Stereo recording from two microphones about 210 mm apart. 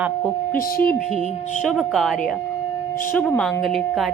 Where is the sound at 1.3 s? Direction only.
35° left (ahead or behind).